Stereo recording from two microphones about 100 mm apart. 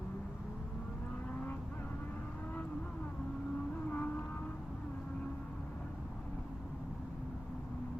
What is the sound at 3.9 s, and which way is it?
Vehicle, 15° left (ahead or behind).